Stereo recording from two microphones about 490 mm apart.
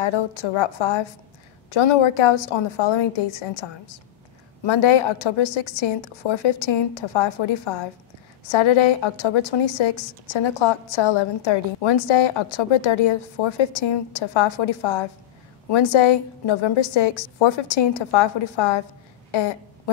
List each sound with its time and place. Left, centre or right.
0.0 s a woman's voice: left